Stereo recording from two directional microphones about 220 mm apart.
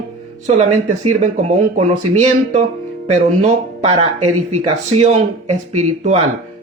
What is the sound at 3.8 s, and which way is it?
Speech, 25° right (ahead or behind).